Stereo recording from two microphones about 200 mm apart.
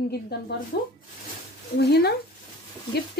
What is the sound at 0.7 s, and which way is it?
Speech, 55° left (ahead or behind).